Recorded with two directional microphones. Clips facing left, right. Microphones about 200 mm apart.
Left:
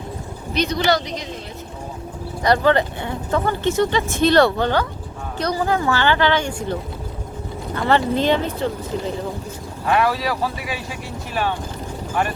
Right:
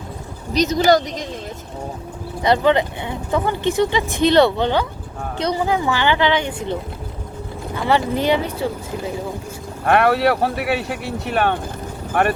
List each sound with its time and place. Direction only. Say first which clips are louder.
0.5 s speech: right 4 dB; 45° right (ahead or behind)
2.4 s speech: right 1 dB; 20° right (ahead or behind)
7.8 s speech: left 1 dB; 10° right (ahead or behind)
9.8 s speech: right 4 dB; 60° right (ahead or behind)